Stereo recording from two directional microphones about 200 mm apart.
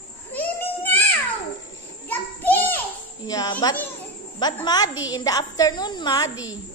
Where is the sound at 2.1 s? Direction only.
10° left (ahead or behind).